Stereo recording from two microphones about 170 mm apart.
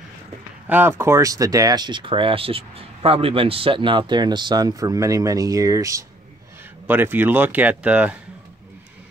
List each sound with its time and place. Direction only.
0.7 s speech: 10° right (ahead or behind)